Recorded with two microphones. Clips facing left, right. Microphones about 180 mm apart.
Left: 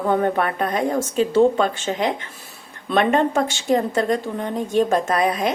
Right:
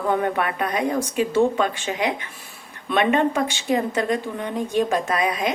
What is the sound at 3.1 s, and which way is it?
A woman's voice, 45° left (ahead or behind).